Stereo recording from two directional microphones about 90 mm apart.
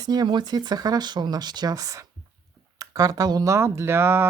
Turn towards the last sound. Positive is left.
turn(degrees=-25)  # may be behind; listen again after turning